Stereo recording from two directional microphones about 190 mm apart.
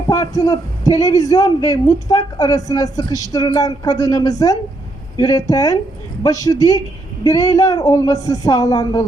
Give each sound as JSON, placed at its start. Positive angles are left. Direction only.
{"t": 0.1, "sound": "speech", "side_deg": 20}